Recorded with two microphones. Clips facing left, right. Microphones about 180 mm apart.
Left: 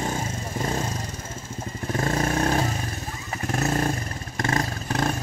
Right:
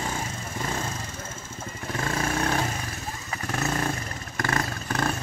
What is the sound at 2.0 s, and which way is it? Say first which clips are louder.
Vehicle: left 4 dB; 40° left (ahead or behind).